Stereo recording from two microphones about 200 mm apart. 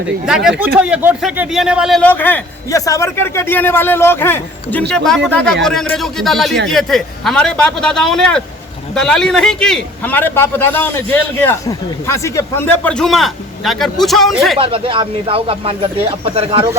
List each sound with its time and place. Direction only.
0.3 s a man's voice: 5° right (ahead or behind)
14.6 s speech: 25° right (ahead or behind)